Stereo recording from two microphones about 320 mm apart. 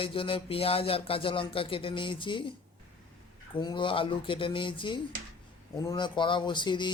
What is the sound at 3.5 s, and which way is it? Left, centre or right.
Speech, centre.